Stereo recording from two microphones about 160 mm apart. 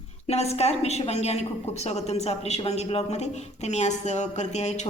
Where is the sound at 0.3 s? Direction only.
40° left (ahead or behind).